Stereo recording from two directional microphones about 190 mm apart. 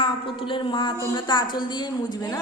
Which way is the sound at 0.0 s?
25° left (ahead or behind).